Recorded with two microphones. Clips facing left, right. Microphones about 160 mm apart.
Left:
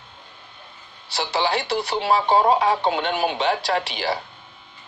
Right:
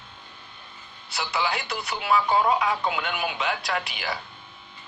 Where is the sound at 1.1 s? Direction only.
30° left (ahead or behind).